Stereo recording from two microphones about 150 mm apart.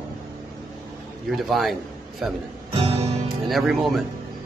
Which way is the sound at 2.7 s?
40° right (ahead or behind).